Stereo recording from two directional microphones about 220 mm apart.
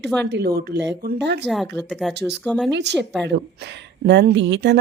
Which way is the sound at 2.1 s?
50° right (ahead or behind).